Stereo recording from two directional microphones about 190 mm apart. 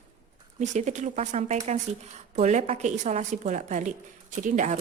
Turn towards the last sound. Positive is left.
turn(degrees=-40)  # may be behind; listen again after turning